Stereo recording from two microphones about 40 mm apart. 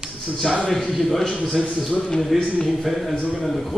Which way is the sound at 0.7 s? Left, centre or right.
Centre.